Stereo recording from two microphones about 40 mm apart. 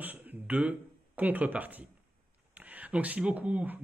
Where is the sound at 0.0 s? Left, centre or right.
Right.